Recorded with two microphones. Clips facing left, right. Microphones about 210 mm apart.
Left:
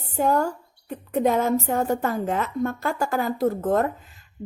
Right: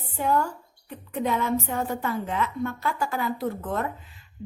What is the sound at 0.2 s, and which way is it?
A woman's voice, 45° left (ahead or behind).